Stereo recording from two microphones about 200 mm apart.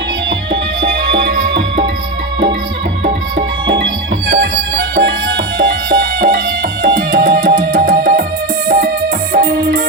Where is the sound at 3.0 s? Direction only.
55° right (ahead or behind).